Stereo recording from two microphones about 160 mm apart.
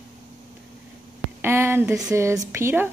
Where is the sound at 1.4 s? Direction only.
15° right (ahead or behind).